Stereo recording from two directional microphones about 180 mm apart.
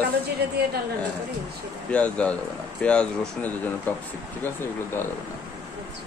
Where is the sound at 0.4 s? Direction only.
65° right (ahead or behind).